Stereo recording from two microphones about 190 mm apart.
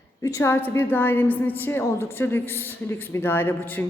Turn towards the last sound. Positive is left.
turn(degrees=10)  # may be behind; listen again after turning